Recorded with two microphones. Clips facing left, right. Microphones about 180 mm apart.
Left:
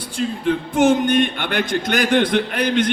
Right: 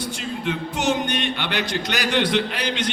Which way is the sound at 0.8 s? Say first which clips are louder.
Left 9 dB; 50° left (ahead or behind).